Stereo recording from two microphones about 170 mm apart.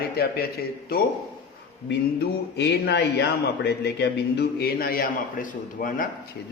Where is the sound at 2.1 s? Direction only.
85° left.